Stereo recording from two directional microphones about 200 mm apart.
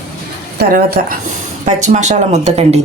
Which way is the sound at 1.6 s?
35° right (ahead or behind).